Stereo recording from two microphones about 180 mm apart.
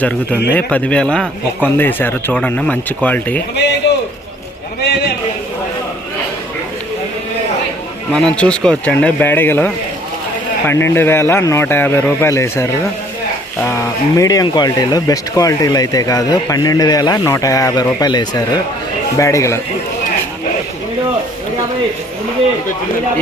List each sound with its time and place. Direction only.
0.5 s speech: 5° left (ahead or behind)
3.5 s a man's voice: 70° left (ahead or behind)
4.8 s a sound: 65° left (ahead or behind)
8.1 s speech: 5° left (ahead or behind)